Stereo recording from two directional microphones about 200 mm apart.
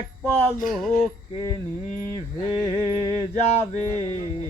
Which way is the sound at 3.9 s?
20° right (ahead or behind).